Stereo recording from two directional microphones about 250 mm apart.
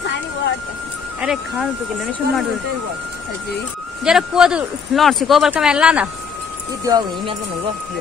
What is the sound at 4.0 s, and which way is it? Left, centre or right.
Speech, centre.